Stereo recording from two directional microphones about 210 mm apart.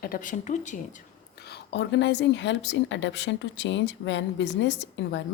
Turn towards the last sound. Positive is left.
turn(degrees=55)  # may be behind; listen again after turning